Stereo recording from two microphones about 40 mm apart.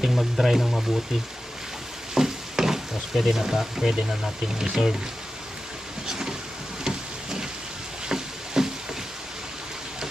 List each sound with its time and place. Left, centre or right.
0.0 s speech: centre
2.1 s stir: centre
4.5 s speech: centre
6.1 s vehicle: centre
6.8 s a sound: centre
8.6 s a sound: centre